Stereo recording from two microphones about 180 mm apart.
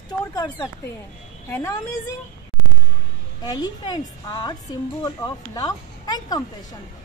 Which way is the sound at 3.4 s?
25° left (ahead or behind).